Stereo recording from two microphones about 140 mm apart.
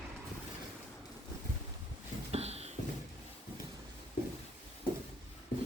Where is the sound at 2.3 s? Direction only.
50° right (ahead or behind).